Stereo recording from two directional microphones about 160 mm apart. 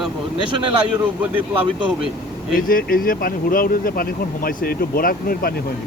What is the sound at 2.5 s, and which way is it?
Speech, 60° left (ahead or behind).